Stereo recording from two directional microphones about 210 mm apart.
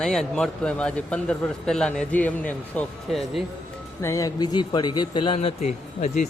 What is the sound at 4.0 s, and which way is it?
Speech, 15° left (ahead or behind).